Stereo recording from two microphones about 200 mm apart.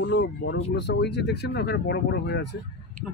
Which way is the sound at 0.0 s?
65° left (ahead or behind).